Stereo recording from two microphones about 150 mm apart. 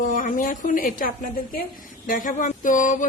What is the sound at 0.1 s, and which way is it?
A woman's voice, 60° left (ahead or behind).